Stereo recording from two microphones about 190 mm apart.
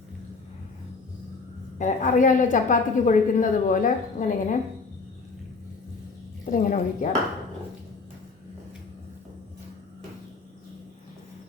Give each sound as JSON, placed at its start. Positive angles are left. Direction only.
{"t": 1.8, "sound": "a woman's voice", "side_deg": 40}
{"t": 6.4, "sound": "a woman's voice", "side_deg": 45}